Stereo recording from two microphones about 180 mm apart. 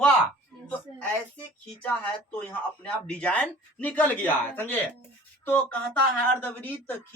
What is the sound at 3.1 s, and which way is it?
A man's voice, 5° left (ahead or behind).